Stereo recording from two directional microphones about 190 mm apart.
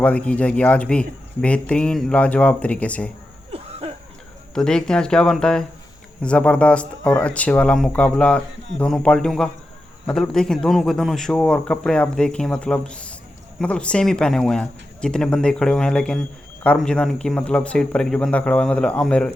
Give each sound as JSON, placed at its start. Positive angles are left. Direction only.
{"t": 0.0, "sound": "speech", "side_deg": 5}
{"t": 3.5, "sound": "a sound", "side_deg": -30}
{"t": 4.5, "sound": "a man's voice", "side_deg": 5}